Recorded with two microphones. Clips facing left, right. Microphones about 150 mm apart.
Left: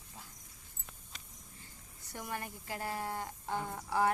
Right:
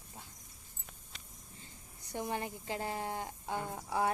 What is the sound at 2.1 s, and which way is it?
Speech, 20° right (ahead or behind).